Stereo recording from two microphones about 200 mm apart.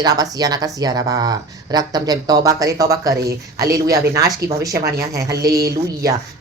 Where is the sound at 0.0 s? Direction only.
20° right (ahead or behind).